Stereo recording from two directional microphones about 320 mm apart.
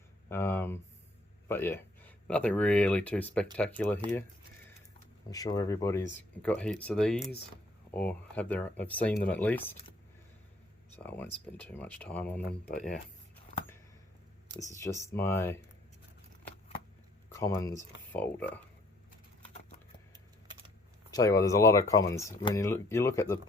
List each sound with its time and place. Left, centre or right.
0.3 s speech: centre
5.3 s speech: centre
10.9 s speech: centre
12.4 s speech: left
15.0 s speech: centre
17.2 s speech: centre
21.1 s speech: centre